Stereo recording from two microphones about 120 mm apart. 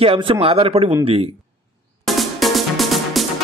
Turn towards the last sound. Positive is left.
turn(degrees=0)  # may be behind; listen again after turning